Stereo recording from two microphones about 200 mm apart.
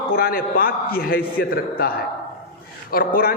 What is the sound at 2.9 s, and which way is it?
Speech, 45° left (ahead or behind).